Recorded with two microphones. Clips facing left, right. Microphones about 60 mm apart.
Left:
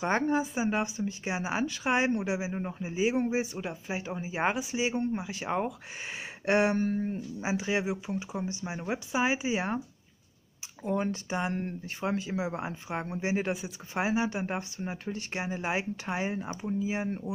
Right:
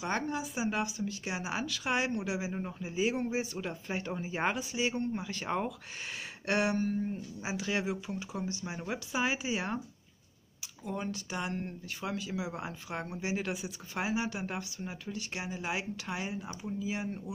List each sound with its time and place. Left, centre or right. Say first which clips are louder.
0.0 s speech: left 6 dB; left
3.6 s speech: left 1 dB; centre
6.4 s speech: left 5 dB; left
7.3 s speech: left 5 dB; left
10.8 s speech: left 7 dB; left